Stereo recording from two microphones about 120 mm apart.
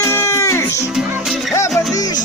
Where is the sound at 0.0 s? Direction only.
20° left (ahead or behind).